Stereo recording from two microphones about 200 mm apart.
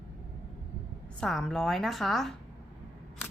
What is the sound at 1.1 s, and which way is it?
A woman's voice, 5° left (ahead or behind).